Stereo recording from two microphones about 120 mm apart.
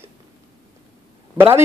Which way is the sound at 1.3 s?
20° right (ahead or behind).